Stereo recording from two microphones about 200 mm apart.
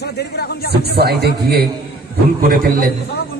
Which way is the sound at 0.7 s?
55° right (ahead or behind).